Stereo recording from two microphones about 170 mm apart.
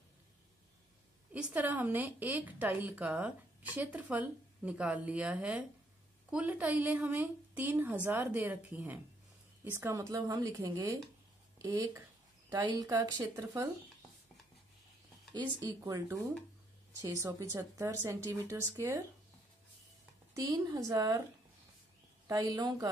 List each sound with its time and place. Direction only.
1.3 s a woman's voice: 10° right (ahead or behind)
15.3 s a woman's voice: 20° right (ahead or behind)
20.3 s speech: 20° right (ahead or behind)
22.3 s speech: 25° right (ahead or behind)